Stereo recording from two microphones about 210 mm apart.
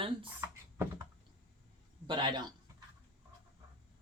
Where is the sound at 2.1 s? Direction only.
20° right (ahead or behind).